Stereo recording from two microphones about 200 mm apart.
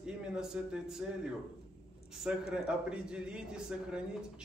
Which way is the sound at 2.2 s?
5° right (ahead or behind).